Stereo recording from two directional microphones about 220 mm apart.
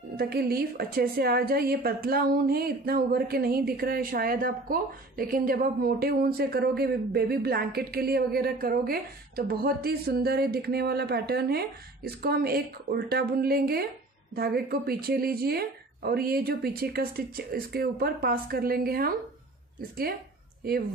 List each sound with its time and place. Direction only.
0.1 s a woman's voice: 45° right (ahead or behind)
20.6 s a woman's voice: 45° right (ahead or behind)